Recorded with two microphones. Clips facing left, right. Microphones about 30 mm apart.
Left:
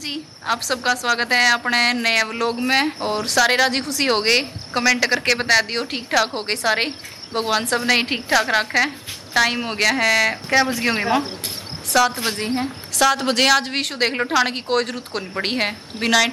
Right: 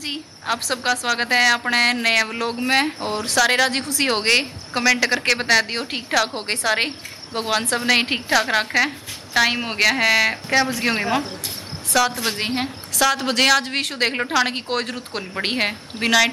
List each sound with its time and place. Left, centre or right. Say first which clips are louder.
0.0 s a woman's voice: left 1 dB; centre
10.3 s a woman's voice: left 1 dB; centre
12.4 s a woman's voice: even; right
13.0 s a woman's voice: left 1 dB; centre